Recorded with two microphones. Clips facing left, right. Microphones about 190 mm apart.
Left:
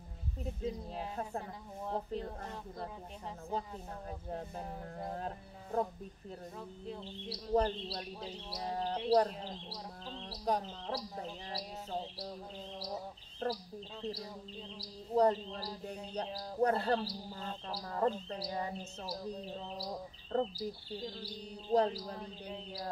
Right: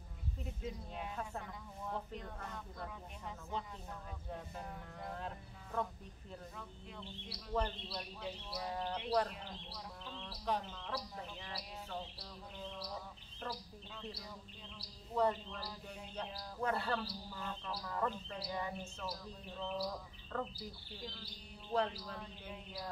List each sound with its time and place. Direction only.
0.6 s speech: 35° left (ahead or behind)
4.3 s speech: 35° left (ahead or behind)
6.9 s speech: 35° left (ahead or behind)
15.1 s speech: 35° left (ahead or behind)